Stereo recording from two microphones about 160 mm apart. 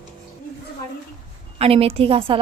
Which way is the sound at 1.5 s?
40° right (ahead or behind).